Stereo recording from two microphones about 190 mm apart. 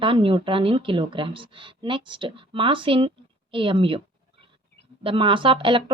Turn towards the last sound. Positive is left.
turn(degrees=-25)  # may be behind; listen again after turning